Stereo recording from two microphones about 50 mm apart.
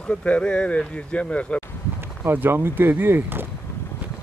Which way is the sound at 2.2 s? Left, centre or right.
Right.